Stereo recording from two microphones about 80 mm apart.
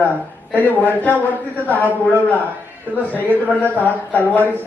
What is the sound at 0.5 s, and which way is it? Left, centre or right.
A man's voice, left.